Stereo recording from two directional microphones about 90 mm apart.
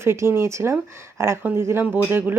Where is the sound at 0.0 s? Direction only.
30° right (ahead or behind).